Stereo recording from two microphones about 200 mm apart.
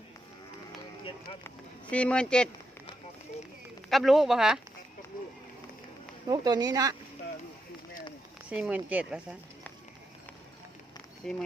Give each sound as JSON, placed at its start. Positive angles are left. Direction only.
{"t": 1.5, "sound": "speech", "side_deg": 5}
{"t": 3.8, "sound": "speech", "side_deg": 0}
{"t": 6.2, "sound": "speech", "side_deg": -20}
{"t": 8.4, "sound": "speech", "side_deg": -5}
{"t": 11.2, "sound": "speech", "side_deg": 0}